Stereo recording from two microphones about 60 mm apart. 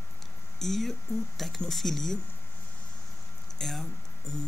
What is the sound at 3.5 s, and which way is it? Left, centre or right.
Speech, centre.